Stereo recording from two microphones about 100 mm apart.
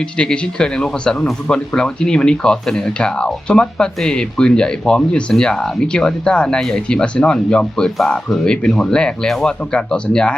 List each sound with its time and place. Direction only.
0.0 s speech: 10° left (ahead or behind)